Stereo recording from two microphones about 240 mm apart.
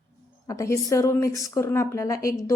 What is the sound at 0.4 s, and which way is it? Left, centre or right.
Speech, centre.